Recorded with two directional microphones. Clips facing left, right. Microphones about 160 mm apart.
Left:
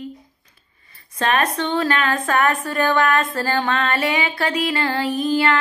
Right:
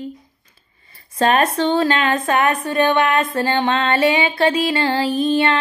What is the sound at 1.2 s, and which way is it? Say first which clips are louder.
A woman's voice: right 4 dB; 30° right (ahead or behind).